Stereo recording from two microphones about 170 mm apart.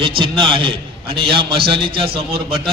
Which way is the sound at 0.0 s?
30° right (ahead or behind).